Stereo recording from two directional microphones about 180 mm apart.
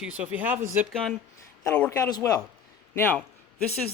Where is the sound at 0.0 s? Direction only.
5° right (ahead or behind).